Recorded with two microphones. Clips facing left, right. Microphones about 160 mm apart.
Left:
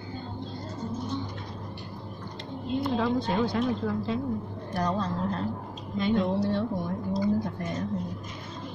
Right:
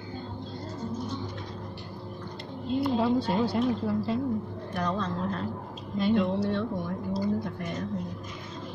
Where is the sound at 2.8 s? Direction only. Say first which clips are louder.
Right 2 dB; 10° right (ahead or behind).